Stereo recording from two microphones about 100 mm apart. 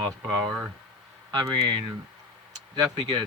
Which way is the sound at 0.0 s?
45° right (ahead or behind).